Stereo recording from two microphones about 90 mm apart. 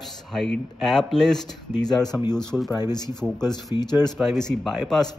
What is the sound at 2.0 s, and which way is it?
Speech, 45° left (ahead or behind).